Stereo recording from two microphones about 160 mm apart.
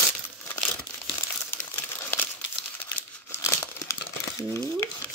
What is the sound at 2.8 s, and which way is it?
Crumpling, 10° left (ahead or behind).